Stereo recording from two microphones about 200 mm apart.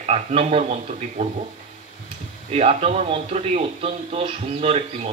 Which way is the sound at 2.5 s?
30° right (ahead or behind).